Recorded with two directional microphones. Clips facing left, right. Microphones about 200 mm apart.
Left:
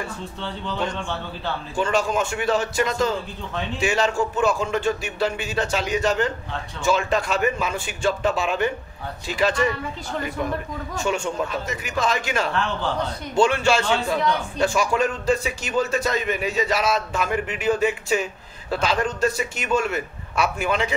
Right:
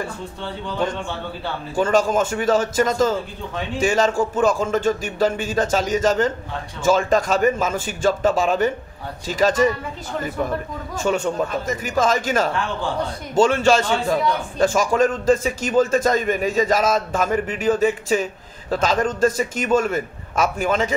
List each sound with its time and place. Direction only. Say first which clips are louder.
1.8 s a man's voice: right 5 dB; 45° right (ahead or behind)
11.1 s a man's voice: right 4 dB; 40° right (ahead or behind)